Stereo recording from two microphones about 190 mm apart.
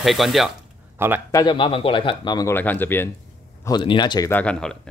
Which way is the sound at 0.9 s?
10° right (ahead or behind).